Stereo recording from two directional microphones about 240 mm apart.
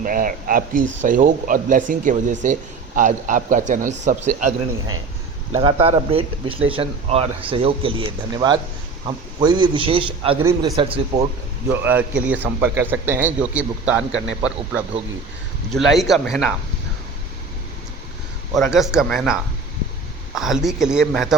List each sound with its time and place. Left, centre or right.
0.0 s speech: right
11.7 s a man's voice: centre
18.5 s a man's voice: centre